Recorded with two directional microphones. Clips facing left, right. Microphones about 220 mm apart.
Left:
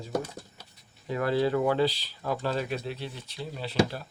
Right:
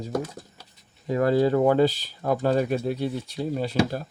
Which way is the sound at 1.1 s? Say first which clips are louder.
Right 5 dB; 45° right (ahead or behind).